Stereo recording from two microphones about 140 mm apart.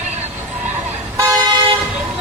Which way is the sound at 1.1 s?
25° right (ahead or behind).